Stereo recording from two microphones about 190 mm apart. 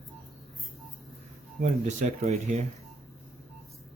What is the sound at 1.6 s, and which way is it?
Speech, 40° right (ahead or behind).